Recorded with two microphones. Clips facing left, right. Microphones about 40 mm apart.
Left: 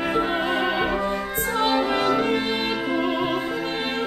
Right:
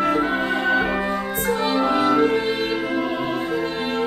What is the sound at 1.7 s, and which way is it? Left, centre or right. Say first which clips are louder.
Music: right 3 dB; centre.